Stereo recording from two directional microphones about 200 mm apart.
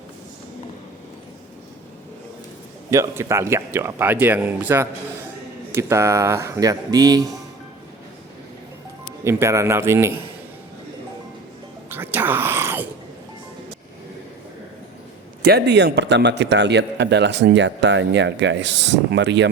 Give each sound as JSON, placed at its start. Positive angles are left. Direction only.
{"t": 2.9, "sound": "speech", "side_deg": -15}
{"t": 9.2, "sound": "speech", "side_deg": -15}
{"t": 11.9, "sound": "a sound", "side_deg": -10}
{"t": 15.4, "sound": "a man's voice", "side_deg": -55}